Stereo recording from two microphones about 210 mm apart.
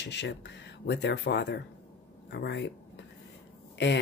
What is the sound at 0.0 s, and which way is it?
Speech, 55° left (ahead or behind).